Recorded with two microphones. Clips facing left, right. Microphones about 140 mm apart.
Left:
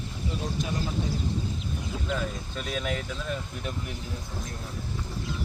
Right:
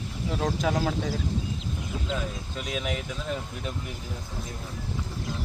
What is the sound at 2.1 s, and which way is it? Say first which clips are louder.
Speech: left 1 dB; 5° right (ahead or behind).